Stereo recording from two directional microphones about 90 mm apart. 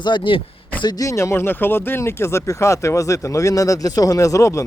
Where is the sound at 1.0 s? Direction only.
30° left (ahead or behind).